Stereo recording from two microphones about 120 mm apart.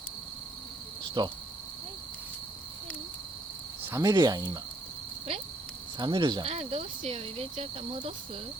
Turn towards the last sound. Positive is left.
turn(degrees=-55)  # may be behind; listen again after turning